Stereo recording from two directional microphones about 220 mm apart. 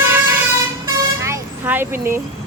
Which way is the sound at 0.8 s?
15° right (ahead or behind).